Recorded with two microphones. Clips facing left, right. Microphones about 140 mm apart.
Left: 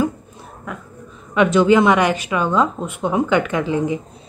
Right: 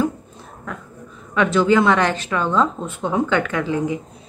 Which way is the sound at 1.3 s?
15° left (ahead or behind).